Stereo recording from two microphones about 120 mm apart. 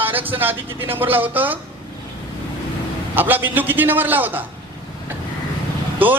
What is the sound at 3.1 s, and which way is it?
Speech, 15° right (ahead or behind).